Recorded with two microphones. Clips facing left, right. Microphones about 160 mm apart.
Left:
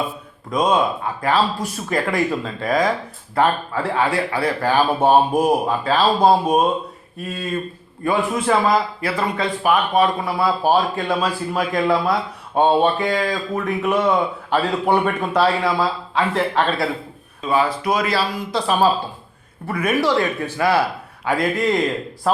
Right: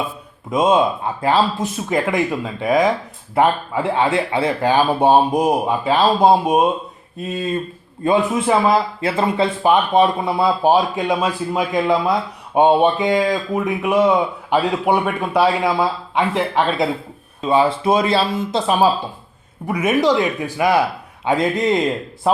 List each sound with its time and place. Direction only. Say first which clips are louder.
0.5 s speech: right 3 dB; 25° right (ahead or behind)
17.4 s speech: right 4 dB; 25° right (ahead or behind)